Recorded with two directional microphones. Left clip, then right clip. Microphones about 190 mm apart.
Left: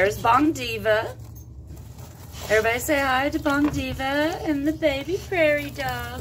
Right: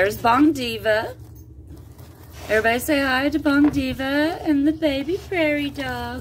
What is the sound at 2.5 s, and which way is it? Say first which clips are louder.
Speech: right 2 dB; 30° right (ahead or behind).